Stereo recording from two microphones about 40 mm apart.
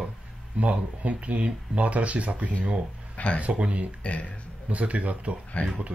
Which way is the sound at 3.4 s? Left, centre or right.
Right.